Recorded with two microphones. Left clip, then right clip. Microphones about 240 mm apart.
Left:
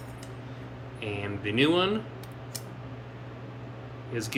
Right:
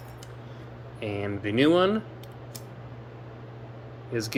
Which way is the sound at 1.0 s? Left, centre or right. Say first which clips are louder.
Right 2 dB; right.